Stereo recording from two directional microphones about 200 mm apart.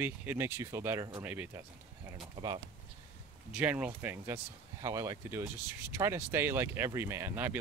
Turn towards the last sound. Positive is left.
turn(degrees=-10)  # may be behind; listen again after turning